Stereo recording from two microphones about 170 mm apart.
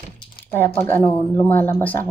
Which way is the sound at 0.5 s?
10° left (ahead or behind).